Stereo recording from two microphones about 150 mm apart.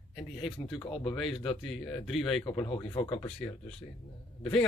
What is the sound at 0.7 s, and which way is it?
Speech, 35° left (ahead or behind).